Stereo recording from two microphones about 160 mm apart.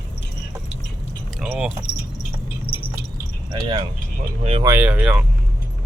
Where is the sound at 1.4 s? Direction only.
5° right (ahead or behind).